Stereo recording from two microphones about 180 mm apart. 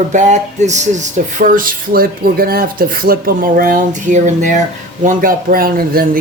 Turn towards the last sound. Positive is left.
turn(degrees=-55)  # may be behind; listen again after turning